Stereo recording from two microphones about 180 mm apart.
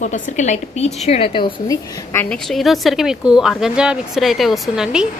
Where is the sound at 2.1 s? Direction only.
10° left (ahead or behind).